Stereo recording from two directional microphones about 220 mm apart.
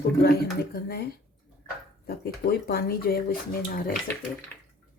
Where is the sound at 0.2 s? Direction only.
45° left (ahead or behind).